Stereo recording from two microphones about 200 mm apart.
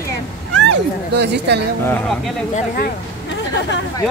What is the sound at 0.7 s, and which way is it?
Speech, 60° right (ahead or behind).